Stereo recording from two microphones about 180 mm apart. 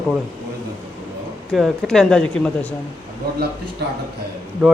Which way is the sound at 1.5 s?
Centre (ahead or behind).